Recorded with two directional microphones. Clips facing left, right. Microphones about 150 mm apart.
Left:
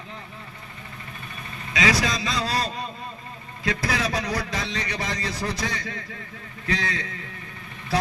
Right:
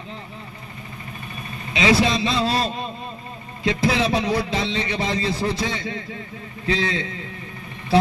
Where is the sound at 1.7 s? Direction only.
25° right (ahead or behind).